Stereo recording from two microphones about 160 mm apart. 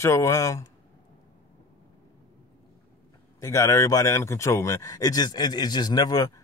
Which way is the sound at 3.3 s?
20° left (ahead or behind).